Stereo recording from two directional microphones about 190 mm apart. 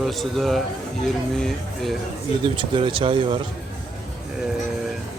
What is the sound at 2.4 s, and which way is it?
Speech, 25° right (ahead or behind).